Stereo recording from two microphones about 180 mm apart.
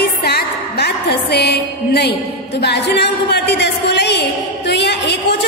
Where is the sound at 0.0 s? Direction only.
65° left (ahead or behind).